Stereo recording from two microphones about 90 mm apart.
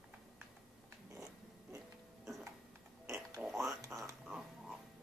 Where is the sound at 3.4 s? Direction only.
5° right (ahead or behind).